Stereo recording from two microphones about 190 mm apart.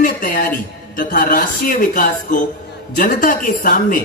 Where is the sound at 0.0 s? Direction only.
45° left (ahead or behind).